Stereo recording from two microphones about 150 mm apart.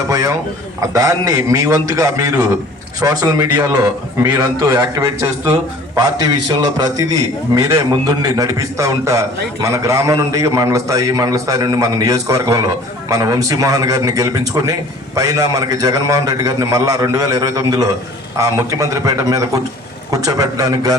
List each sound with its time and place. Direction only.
0.1 s a man's voice: 25° right (ahead or behind)